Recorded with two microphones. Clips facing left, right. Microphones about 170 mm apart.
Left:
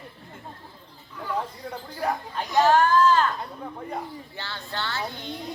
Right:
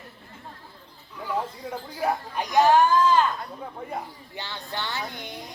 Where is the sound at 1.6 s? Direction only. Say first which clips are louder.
Right 3 dB; 5° right (ahead or behind).